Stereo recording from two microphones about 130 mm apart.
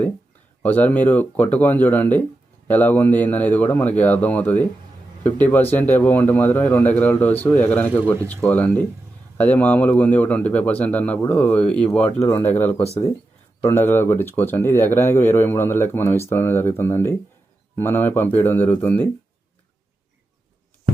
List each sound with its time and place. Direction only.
0.6 s speech: 15° left (ahead or behind)